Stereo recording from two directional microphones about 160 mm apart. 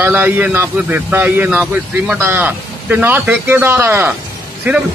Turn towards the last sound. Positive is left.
turn(degrees=-10)  # may be behind; listen again after turning